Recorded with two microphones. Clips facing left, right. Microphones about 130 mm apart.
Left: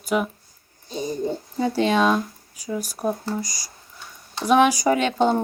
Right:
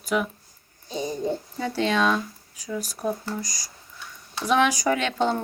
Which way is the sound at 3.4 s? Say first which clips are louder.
Left 3 dB; 5° left (ahead or behind).